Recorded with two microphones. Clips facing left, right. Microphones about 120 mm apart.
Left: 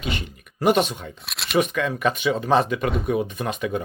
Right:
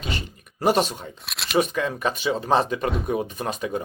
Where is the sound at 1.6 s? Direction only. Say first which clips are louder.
Left 1 dB; 35° right (ahead or behind).